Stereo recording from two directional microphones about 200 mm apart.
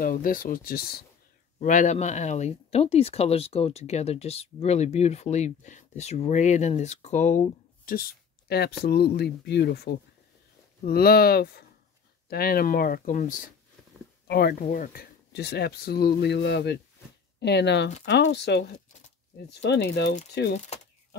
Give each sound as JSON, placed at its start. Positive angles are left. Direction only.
{"t": 0.0, "sound": "speech", "side_deg": 45}
{"t": 1.6, "sound": "speech", "side_deg": 40}
{"t": 14.2, "sound": "speech", "side_deg": 50}